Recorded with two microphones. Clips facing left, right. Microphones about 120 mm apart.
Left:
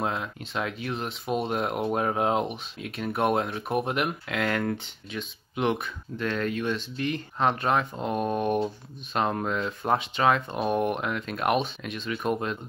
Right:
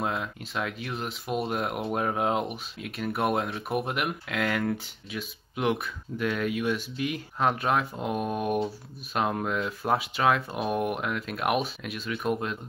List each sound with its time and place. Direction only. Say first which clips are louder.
0.0 s speech: left 1 dB; centre (ahead or behind)